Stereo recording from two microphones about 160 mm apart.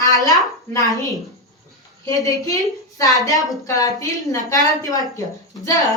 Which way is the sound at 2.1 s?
20° left (ahead or behind).